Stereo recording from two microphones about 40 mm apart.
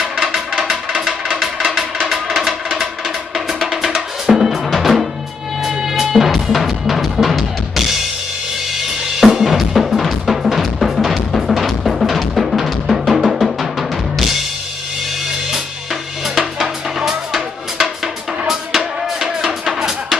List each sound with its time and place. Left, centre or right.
0.0 s music: centre
4.3 s drum: centre
4.6 s music: centre
5.6 s music: centre
8.7 s drum kit: centre
9.4 s drum: centre
16.3 s music: centre